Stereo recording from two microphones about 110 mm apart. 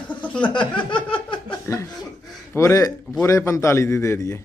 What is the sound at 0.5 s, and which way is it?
Speech, 50° left (ahead or behind).